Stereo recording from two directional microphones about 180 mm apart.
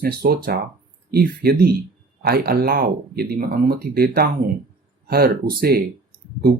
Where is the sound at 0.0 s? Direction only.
60° right (ahead or behind).